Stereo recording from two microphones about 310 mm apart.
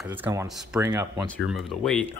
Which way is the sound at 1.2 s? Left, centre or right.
Centre.